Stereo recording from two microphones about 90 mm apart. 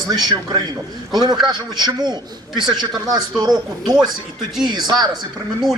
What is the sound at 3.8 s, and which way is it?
Speech, 50° right (ahead or behind).